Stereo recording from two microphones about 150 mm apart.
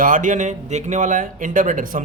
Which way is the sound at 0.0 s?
60° right (ahead or behind).